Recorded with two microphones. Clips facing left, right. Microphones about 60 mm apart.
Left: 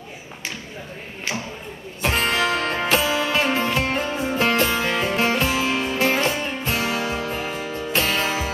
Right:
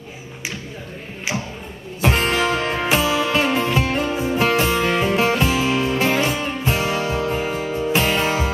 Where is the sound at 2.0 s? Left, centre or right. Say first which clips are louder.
Right 2 dB; centre.